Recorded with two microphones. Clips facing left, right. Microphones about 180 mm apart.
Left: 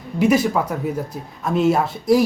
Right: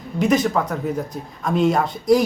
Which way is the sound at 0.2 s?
10° left (ahead or behind).